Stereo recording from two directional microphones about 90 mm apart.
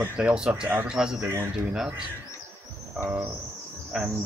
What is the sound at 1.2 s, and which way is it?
Speech, 25° right (ahead or behind).